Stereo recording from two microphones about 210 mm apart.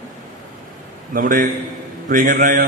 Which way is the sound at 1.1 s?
40° right (ahead or behind).